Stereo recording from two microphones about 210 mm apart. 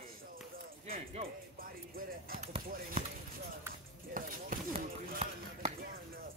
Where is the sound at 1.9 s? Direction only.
45° right (ahead or behind).